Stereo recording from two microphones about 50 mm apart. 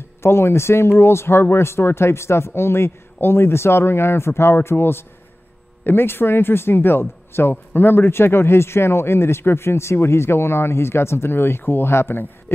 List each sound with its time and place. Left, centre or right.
0.2 s a man's voice: left